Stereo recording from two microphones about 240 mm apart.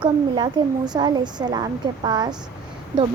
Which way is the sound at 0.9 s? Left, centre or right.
Centre.